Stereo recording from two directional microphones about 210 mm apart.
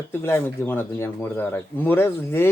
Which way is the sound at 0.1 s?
10° left (ahead or behind).